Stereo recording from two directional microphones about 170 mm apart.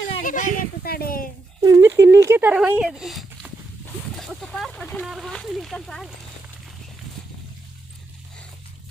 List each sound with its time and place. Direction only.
0.2 s speech: 50° left (ahead or behind)
1.6 s speech: 15° right (ahead or behind); by 6.1 s centre (ahead or behind)